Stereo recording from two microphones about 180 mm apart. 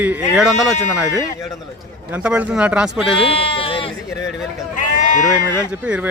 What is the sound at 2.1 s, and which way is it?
Speech, 5° right (ahead or behind).